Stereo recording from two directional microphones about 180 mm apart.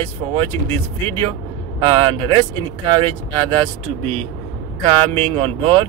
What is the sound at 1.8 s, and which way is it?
Speech, 30° right (ahead or behind).